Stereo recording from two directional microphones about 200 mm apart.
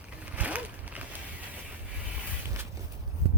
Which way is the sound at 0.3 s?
5° right (ahead or behind).